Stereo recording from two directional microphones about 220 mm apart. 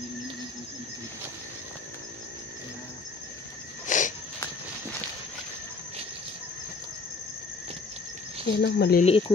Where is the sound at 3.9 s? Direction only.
35° left (ahead or behind).